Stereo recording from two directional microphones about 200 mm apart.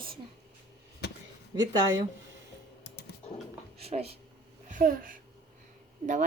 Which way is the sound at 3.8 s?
30° right (ahead or behind).